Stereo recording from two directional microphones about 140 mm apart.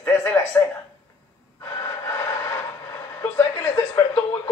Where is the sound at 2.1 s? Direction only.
20° left (ahead or behind).